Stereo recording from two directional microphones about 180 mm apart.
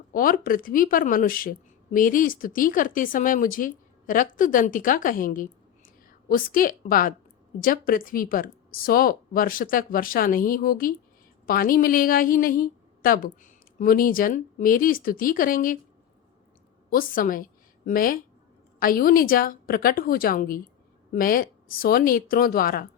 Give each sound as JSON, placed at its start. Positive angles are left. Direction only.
{"t": 0.1, "sound": "speech", "side_deg": 50}
{"t": 16.9, "sound": "a woman's voice", "side_deg": 50}